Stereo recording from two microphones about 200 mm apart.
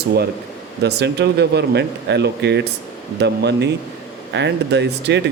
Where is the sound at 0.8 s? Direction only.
55° right (ahead or behind).